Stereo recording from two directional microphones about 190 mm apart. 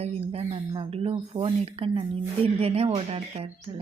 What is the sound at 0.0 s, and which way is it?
Speech, 35° right (ahead or behind).